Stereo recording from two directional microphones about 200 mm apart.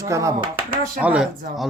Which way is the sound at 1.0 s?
5° right (ahead or behind).